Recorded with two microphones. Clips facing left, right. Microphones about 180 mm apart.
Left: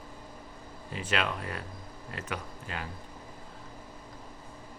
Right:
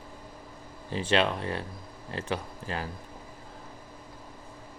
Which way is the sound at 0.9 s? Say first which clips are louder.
Right 6 dB; 30° right (ahead or behind).